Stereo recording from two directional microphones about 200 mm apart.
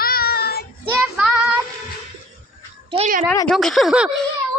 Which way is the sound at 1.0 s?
5° right (ahead or behind).